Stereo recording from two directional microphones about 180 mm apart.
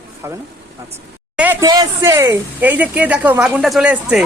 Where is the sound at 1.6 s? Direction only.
20° right (ahead or behind); by 4.2 s 5° right (ahead or behind).